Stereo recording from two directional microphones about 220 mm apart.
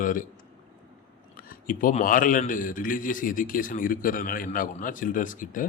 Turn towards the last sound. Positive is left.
turn(degrees=40)  # may be behind; listen again after turning